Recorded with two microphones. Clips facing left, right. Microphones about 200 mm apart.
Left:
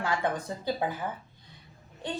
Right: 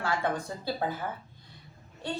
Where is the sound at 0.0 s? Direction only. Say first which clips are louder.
Even; 15° left (ahead or behind).